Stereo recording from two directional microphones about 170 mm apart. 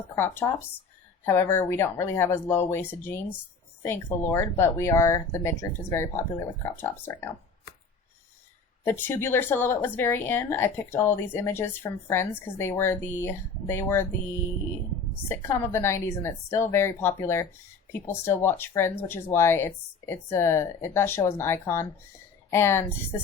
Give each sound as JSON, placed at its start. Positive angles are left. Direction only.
{"t": 0.2, "sound": "speech", "side_deg": 15}
{"t": 8.8, "sound": "speech", "side_deg": 15}
{"t": 15.3, "sound": "speech", "side_deg": 15}